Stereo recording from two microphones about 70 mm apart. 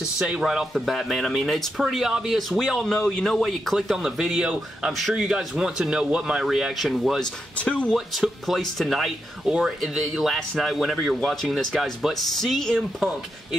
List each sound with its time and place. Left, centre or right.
0.4 s speech: centre
3.7 s speech: centre
7.5 s speech: centre
7.9 s speech: centre
9.5 s speech: centre
9.8 s speech: centre